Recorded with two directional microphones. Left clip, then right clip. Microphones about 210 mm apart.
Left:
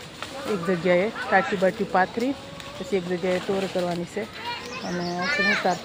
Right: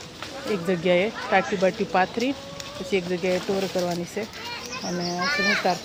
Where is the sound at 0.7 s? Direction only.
Centre (ahead or behind).